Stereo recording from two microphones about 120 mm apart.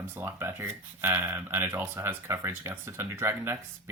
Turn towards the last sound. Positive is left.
turn(degrees=-20)  # may be behind; listen again after turning